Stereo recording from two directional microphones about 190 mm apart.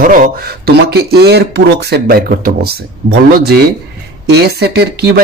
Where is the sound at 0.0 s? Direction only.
45° right (ahead or behind).